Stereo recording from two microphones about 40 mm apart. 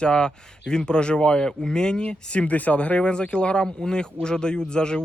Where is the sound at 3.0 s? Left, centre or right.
Left.